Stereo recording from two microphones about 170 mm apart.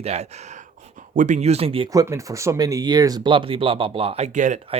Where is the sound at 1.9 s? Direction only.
20° right (ahead or behind).